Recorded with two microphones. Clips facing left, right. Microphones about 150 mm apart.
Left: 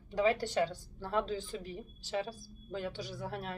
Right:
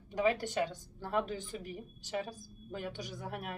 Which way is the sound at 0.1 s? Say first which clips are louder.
Left 1 dB; 20° right (ahead or behind).